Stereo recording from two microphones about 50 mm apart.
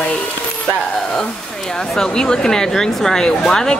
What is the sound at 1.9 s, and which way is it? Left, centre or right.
Speech, centre.